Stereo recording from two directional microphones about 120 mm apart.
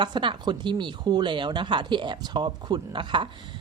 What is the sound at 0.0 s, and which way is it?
A woman's voice, 40° right (ahead or behind).